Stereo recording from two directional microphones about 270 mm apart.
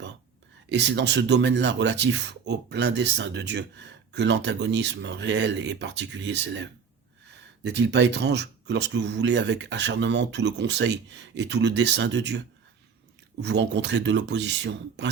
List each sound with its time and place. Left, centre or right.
0.7 s speech: right
13.4 s speech: right